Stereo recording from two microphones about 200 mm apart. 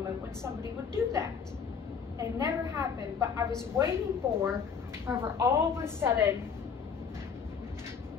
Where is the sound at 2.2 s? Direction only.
15° right (ahead or behind).